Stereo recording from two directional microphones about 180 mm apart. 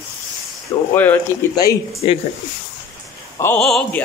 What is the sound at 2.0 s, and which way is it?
Speech, 30° left (ahead or behind).